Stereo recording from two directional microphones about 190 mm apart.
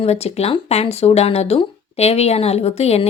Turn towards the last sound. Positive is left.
turn(degrees=35)  # may be behind; listen again after turning